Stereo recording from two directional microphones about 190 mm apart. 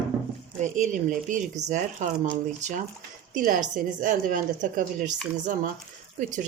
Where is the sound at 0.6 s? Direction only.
40° right (ahead or behind).